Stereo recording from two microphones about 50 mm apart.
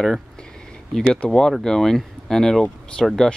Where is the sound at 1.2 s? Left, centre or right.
Centre.